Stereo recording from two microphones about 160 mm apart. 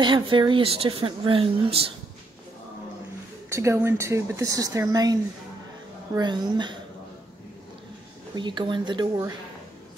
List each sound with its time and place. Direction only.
0.0 s speech: 30° right (ahead or behind)
3.4 s a woman's voice: 15° right (ahead or behind)
8.4 s a woman's voice: 30° right (ahead or behind)